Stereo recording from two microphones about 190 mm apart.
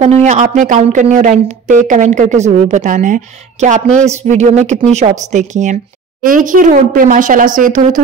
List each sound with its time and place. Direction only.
0.0 s speech: 35° right (ahead or behind)